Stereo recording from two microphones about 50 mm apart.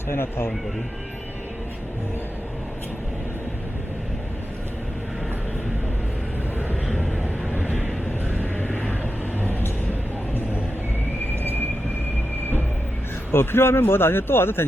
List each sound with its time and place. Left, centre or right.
0.1 s speech: left
9.4 s vehicle: left
13.3 s speech: left